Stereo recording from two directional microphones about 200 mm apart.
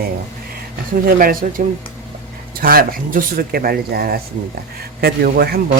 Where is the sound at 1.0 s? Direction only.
45° right (ahead or behind).